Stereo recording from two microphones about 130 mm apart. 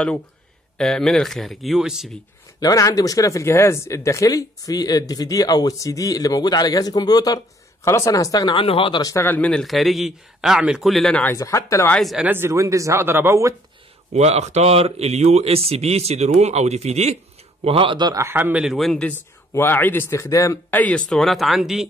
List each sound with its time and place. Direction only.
0.7 s a man's voice: 5° left (ahead or behind)
2.6 s speech: 25° left (ahead or behind); by 9.0 s 45° left (ahead or behind)
9.0 s a man's voice: 20° left (ahead or behind)
11.3 s speech: 25° left (ahead or behind)
12.0 s a man's voice: centre (ahead or behind)
12.3 s speech: 20° right (ahead or behind)
14.1 s speech: 60° right (ahead or behind)
17.6 s a man's voice: 40° right (ahead or behind); by 19.1 s 5° left (ahead or behind)
19.5 s speech: 15° left (ahead or behind)
20.7 s a man's voice: 10° left (ahead or behind)